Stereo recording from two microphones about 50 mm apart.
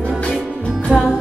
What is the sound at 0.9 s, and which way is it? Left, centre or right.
Music, centre.